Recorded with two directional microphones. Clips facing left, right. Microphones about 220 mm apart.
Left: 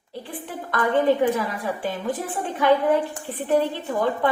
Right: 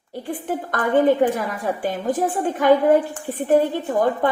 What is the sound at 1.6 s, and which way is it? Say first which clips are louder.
A woman's voice: right 3 dB; 45° right (ahead or behind).